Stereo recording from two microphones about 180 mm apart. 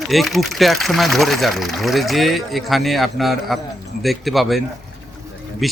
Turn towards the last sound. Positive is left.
turn(degrees=0)  # may be behind; listen again after turning